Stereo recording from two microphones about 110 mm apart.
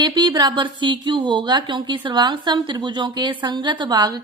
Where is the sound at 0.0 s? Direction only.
45° right (ahead or behind).